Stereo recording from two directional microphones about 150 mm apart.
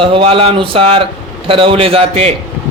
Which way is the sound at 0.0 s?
35° right (ahead or behind).